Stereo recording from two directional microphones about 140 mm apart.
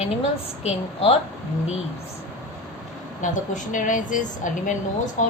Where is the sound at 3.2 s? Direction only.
65° left (ahead or behind).